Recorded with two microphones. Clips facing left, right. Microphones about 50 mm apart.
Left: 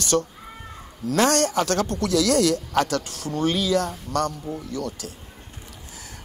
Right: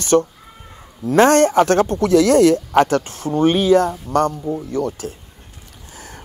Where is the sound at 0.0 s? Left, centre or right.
Right.